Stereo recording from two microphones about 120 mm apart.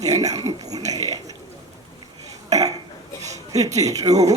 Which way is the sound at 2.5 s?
30° right (ahead or behind).